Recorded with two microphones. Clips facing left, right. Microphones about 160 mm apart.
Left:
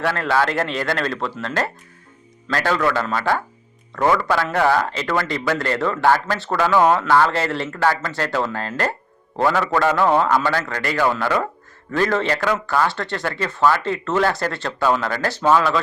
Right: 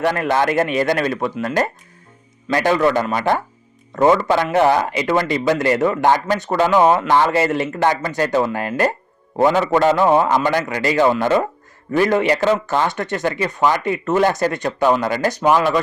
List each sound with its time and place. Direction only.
0.0 s a man's voice: 15° right (ahead or behind)